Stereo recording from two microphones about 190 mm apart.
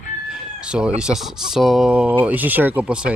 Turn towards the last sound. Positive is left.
turn(degrees=-5)  # may be behind; listen again after turning